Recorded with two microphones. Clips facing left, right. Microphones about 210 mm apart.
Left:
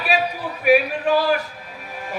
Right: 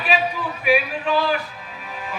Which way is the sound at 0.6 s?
45° left (ahead or behind).